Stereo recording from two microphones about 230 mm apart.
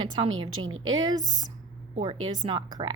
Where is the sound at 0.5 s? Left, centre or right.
Right.